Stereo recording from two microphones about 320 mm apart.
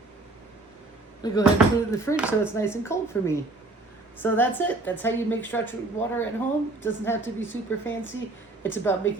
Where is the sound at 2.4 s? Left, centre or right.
Centre.